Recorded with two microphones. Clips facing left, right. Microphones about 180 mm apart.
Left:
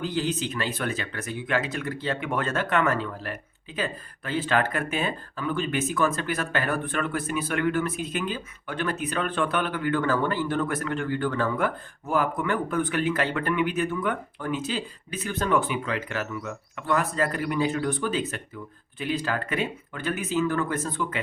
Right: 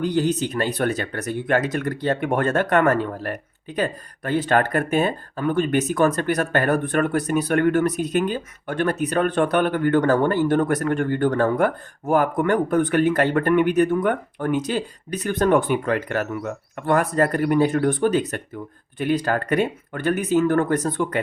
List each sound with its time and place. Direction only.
0.2 s speech: 45° right (ahead or behind)